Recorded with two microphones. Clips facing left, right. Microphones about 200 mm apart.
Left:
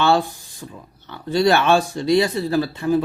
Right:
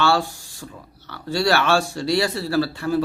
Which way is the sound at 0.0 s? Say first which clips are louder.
Left 2 dB; 20° left (ahead or behind).